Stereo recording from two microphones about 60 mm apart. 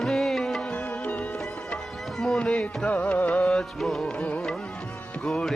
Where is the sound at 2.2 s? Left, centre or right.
Centre.